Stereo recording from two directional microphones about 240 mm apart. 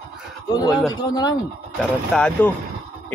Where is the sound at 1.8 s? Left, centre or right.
Centre.